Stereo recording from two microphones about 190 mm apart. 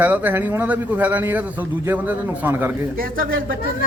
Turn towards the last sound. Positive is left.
turn(degrees=-50)  # may be behind; listen again after turning